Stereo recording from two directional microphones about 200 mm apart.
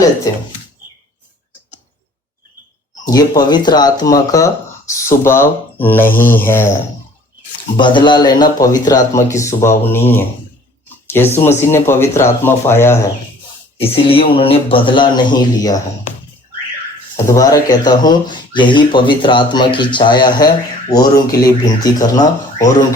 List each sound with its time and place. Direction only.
0.3 s a man's voice: 15° left (ahead or behind)
3.1 s a man's voice: 20° left (ahead or behind)
7.8 s a man's voice: 25° left (ahead or behind)
13.7 s speech: 30° left (ahead or behind)
17.2 s a man's voice: 15° left (ahead or behind)